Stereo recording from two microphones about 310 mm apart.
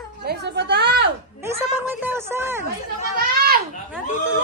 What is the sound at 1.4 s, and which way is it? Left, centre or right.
Speech, centre.